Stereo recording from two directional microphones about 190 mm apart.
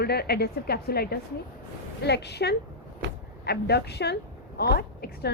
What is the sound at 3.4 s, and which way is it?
A woman's voice, 60° left (ahead or behind).